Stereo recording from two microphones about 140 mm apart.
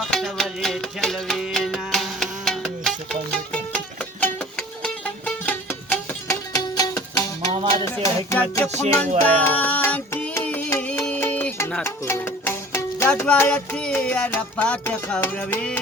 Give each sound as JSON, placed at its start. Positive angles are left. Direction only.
{"t": 0.0, "sound": "music", "side_deg": 0}
{"t": 6.2, "sound": "music", "side_deg": 25}
{"t": 7.5, "sound": "music", "side_deg": -45}
{"t": 7.9, "sound": "music", "side_deg": 20}